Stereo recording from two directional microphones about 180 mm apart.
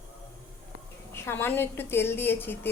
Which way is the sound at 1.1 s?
15° left (ahead or behind).